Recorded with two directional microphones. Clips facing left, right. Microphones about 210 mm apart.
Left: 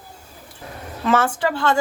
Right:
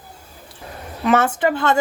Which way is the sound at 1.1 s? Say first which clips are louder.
Right 2 dB; 20° right (ahead or behind).